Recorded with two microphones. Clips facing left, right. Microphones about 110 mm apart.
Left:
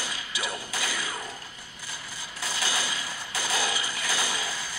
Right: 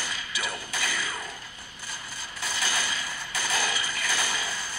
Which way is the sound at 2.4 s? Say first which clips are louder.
Even; 15° left (ahead or behind).